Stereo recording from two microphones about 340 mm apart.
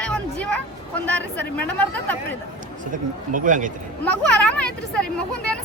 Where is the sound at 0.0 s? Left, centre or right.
Centre.